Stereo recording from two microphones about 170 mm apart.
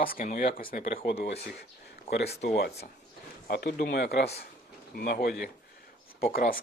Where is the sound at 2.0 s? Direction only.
80° left.